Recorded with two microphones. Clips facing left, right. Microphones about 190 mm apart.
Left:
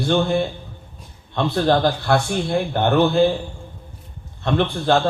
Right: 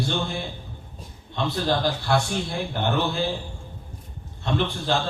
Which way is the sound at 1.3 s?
60° left (ahead or behind).